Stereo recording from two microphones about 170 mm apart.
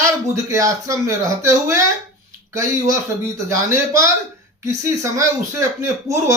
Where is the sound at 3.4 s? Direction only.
20° right (ahead or behind).